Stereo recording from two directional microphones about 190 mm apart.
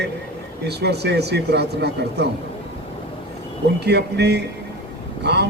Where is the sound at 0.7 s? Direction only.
60° right (ahead or behind).